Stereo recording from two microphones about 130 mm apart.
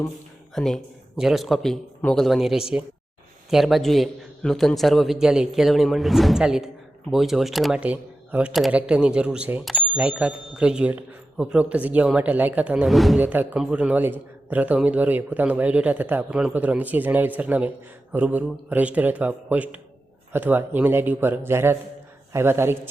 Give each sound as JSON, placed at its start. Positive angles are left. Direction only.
{"t": 0.5, "sound": "a man's voice", "side_deg": 5}
{"t": 13.2, "sound": "a woman's voice", "side_deg": -15}